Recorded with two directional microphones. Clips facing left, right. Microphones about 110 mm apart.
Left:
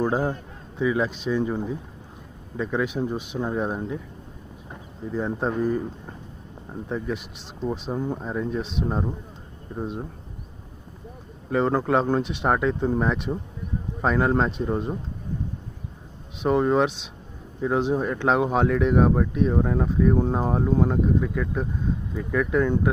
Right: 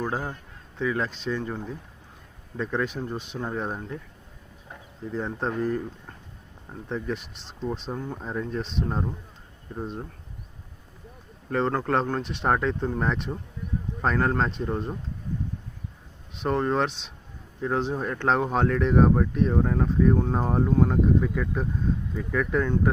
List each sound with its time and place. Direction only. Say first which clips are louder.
0.0 s speech: left 6 dB; 20° left (ahead or behind)
5.0 s speech: left 3 dB; 5° left (ahead or behind)
11.4 s speech: left 3 dB; 5° left (ahead or behind)
16.4 s speech: left 4 dB; 5° left (ahead or behind)